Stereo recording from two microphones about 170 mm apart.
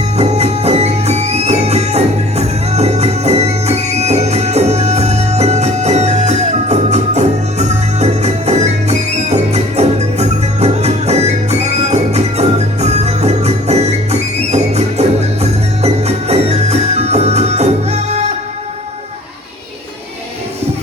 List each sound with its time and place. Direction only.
0.2 s music: 40° right (ahead or behind)